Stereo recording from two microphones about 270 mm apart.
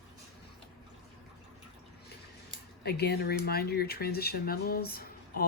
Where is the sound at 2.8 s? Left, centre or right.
Left.